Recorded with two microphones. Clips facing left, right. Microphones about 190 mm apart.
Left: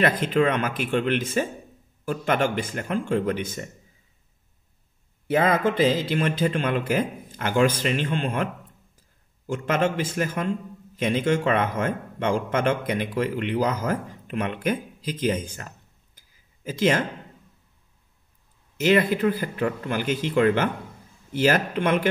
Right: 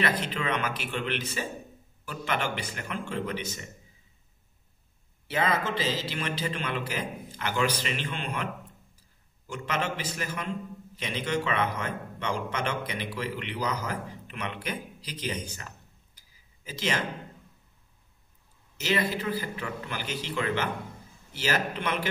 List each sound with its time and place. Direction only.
0.0 s a man's voice: 50° left (ahead or behind)
5.3 s a man's voice: 50° left (ahead or behind)
9.5 s a man's voice: 50° left (ahead or behind)
16.2 s a sound: 50° left (ahead or behind)
18.8 s a man's voice: 50° left (ahead or behind)